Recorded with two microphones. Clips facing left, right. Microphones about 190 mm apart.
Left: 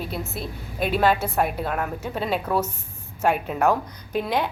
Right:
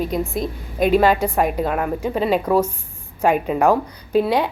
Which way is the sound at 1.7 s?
10° right (ahead or behind).